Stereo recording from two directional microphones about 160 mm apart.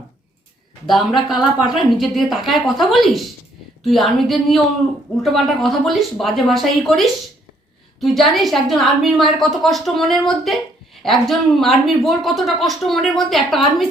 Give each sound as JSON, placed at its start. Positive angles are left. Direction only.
{"t": 0.9, "sound": "speech", "side_deg": 0}